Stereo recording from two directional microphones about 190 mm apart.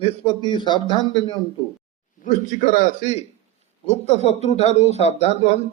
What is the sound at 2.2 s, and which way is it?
A man's voice, 40° left (ahead or behind).